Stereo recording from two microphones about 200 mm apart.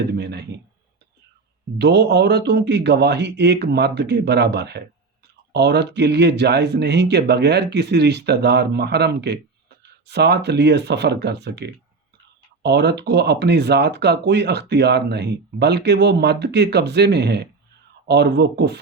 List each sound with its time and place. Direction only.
0.2 s speech: 55° right (ahead or behind)
1.8 s speech: 60° right (ahead or behind)